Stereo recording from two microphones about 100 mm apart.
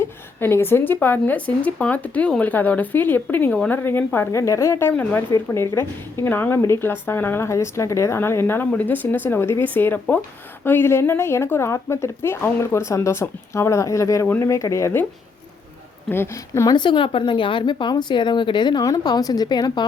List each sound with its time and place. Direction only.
0.0 s a sound: 25° left (ahead or behind)
1.0 s speech: 15° left (ahead or behind)
16.0 s speech: 25° left (ahead or behind)
16.7 s speech: 55° left (ahead or behind)